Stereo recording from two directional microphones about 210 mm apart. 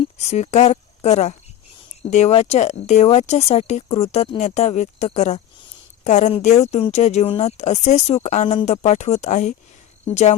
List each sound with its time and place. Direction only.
0.0 s speech: 30° left (ahead or behind)